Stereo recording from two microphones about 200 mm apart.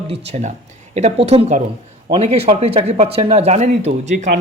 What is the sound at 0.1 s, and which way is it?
Speech, 35° right (ahead or behind).